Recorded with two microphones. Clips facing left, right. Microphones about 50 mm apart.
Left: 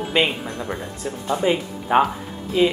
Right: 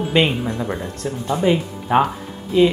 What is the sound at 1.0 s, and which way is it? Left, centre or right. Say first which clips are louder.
Speech: right 1 dB; centre.